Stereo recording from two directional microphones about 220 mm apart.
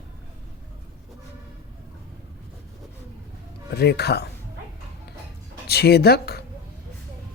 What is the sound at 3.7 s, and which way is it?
Speech, 45° left (ahead or behind).